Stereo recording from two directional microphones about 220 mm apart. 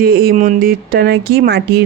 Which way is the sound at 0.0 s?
45° right (ahead or behind).